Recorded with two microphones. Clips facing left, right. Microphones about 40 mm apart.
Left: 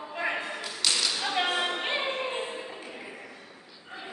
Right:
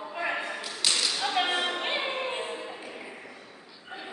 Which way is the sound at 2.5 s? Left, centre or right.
Centre.